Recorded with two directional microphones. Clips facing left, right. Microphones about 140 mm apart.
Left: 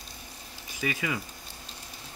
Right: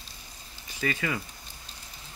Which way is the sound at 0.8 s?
15° left (ahead or behind).